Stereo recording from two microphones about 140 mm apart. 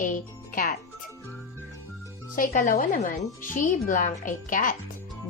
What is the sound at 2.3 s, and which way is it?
Speech, 80° left.